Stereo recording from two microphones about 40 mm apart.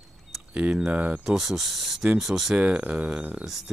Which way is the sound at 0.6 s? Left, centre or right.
Right.